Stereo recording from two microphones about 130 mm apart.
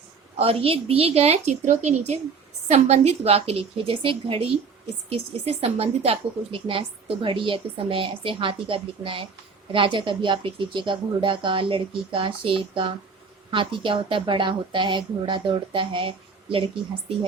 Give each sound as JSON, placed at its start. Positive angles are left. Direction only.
{"t": 0.3, "sound": "a woman's voice", "side_deg": -45}